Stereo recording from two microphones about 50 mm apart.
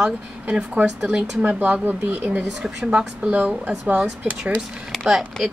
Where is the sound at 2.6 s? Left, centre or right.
Centre.